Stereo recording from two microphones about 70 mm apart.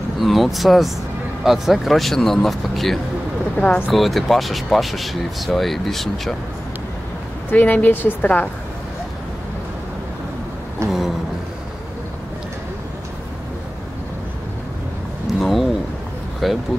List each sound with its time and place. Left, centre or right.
0.2 s speech: centre
3.5 s speech: centre
3.9 s speech: centre
7.4 s a woman's voice: left
10.8 s a sound: right
15.3 s a sound: centre